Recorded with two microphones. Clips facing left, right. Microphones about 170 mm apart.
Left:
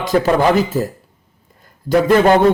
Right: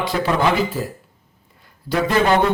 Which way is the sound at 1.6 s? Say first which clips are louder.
Left 6 dB; 45° left (ahead or behind).